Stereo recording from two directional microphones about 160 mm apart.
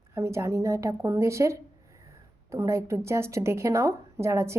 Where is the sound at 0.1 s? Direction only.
15° right (ahead or behind).